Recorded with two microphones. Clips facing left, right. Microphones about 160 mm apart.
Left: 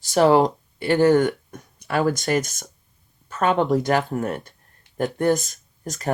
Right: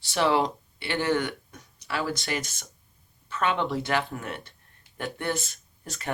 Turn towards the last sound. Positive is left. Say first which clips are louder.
# left 8 dB
turn(degrees=40)  # may be behind; listen again after turning